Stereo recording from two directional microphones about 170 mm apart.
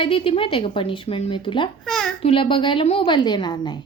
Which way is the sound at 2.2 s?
30° left (ahead or behind).